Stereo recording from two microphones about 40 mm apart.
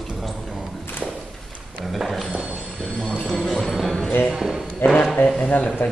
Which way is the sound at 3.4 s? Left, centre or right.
Centre.